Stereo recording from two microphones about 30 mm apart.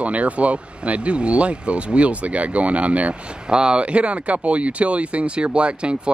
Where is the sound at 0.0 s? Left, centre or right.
Right.